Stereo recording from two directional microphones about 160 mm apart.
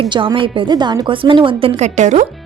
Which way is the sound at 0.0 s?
30° right (ahead or behind).